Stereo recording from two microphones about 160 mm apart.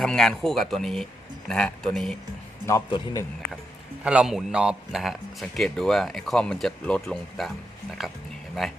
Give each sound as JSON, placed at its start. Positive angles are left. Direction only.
{"t": 0.0, "sound": "a man's voice", "side_deg": 5}
{"t": 2.9, "sound": "a man's voice", "side_deg": 25}
{"t": 4.0, "sound": "a man's voice", "side_deg": -5}